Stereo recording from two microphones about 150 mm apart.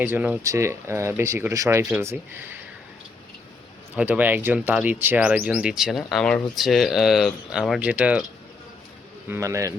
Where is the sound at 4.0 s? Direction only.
10° right (ahead or behind).